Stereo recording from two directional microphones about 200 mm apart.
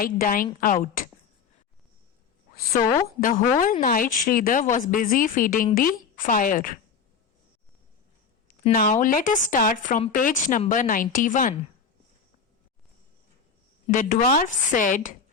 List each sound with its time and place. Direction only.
0.0 s a woman's voice: 45° left (ahead or behind)
3.6 s a woman's voice: 40° left (ahead or behind)
8.7 s a woman's voice: 40° left (ahead or behind)
13.8 s a woman's voice: 40° left (ahead or behind)